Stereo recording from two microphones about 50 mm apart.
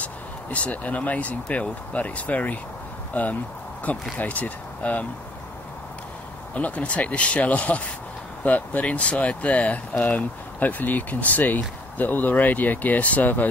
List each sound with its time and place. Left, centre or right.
0.0 s speech: left
6.5 s speech: left